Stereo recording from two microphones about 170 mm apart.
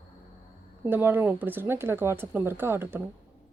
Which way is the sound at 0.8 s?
10° right (ahead or behind).